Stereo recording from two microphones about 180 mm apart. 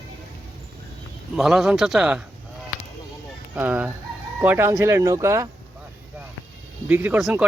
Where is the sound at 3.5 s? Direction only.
10° right (ahead or behind).